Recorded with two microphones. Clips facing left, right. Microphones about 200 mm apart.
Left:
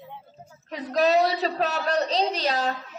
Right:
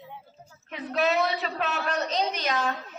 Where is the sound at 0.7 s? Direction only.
40° left (ahead or behind).